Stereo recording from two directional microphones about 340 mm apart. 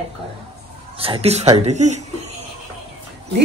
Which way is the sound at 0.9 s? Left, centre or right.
Centre.